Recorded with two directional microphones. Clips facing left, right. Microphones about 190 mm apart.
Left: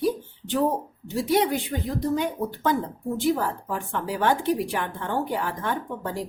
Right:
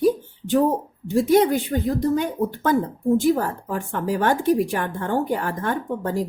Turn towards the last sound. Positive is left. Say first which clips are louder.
# right 4 dB
turn(degrees=-45)  # may be behind; listen again after turning